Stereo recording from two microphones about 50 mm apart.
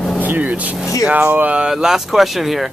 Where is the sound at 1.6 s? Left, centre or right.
Centre.